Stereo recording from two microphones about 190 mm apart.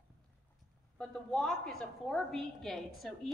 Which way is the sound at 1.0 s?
5° left (ahead or behind).